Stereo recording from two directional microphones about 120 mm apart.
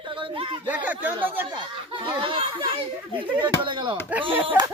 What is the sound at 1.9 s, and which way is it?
Speech, 45° right (ahead or behind).